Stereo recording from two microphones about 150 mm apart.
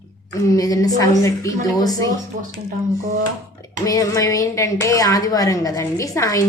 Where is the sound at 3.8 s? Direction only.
25° left (ahead or behind).